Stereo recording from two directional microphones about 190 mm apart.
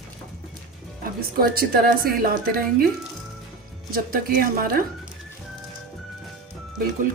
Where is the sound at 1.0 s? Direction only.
50° right (ahead or behind).